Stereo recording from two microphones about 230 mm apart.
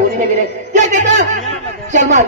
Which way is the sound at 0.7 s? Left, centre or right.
Right.